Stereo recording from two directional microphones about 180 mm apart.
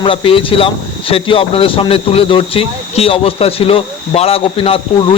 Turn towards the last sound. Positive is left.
turn(degrees=30)  # may be behind; listen again after turning